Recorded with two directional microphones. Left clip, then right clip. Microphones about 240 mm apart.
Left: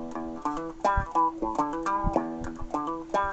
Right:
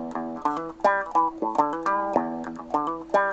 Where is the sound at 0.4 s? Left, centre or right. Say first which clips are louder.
Right 5 dB; right.